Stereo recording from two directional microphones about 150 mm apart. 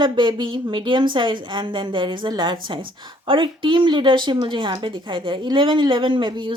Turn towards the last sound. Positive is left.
turn(degrees=-30)  # may be behind; listen again after turning